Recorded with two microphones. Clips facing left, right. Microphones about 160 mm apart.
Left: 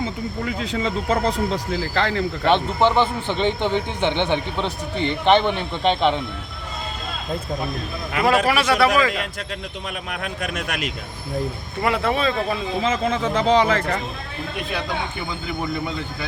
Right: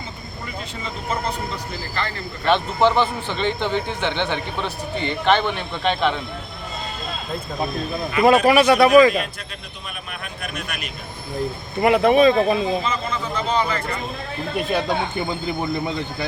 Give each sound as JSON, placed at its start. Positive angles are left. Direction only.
{"t": 0.4, "sound": "speech", "side_deg": 90}
{"t": 2.5, "sound": "speech", "side_deg": 20}
{"t": 8.2, "sound": "speech", "side_deg": -20}
{"t": 10.1, "sound": "speech", "side_deg": 90}
{"t": 11.8, "sound": "speech", "side_deg": -15}
{"t": 12.8, "sound": "speech", "side_deg": 90}